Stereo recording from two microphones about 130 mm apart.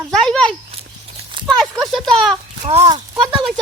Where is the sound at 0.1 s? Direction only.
5° left (ahead or behind).